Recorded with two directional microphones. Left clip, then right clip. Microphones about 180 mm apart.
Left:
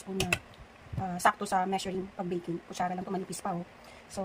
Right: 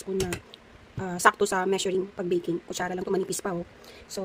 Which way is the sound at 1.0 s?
50° right (ahead or behind).